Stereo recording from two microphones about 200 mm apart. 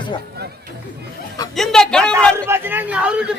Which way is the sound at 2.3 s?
10° right (ahead or behind).